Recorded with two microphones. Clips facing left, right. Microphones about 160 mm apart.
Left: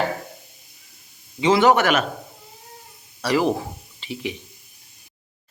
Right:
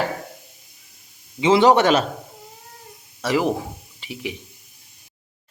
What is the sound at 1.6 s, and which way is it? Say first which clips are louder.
Speech: right 3 dB; 30° right (ahead or behind).